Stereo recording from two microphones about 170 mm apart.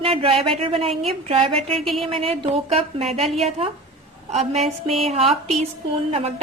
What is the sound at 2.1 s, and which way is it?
Speech, 35° right (ahead or behind).